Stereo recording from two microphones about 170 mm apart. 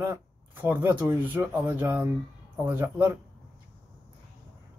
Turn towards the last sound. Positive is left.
turn(degrees=-15)  # may be behind; listen again after turning